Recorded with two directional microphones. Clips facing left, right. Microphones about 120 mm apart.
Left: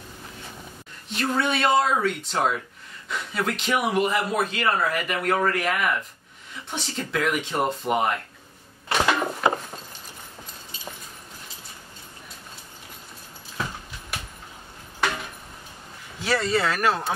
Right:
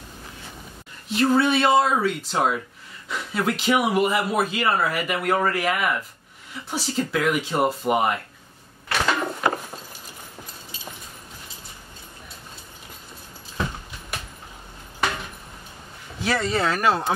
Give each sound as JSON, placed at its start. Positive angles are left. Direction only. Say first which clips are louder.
{"t": 1.0, "sound": "a man's voice", "louder": "right 6 dB", "side_deg": -5}
{"t": 8.8, "sound": "a sound", "louder": "left 1 dB", "side_deg": 20}
{"t": 16.2, "sound": "speech", "louder": "even", "side_deg": -15}